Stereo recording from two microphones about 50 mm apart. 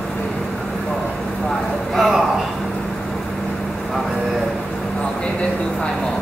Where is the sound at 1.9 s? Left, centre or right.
Centre.